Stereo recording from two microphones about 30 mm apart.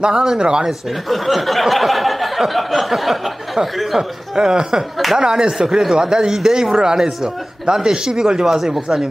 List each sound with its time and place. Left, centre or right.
0.0 s speech: right
0.7 s speech: centre
4.4 s speech: right